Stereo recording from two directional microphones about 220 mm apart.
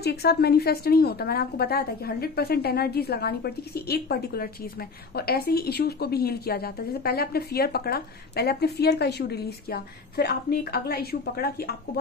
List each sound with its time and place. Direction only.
0.0 s a woman's voice: 45° left (ahead or behind)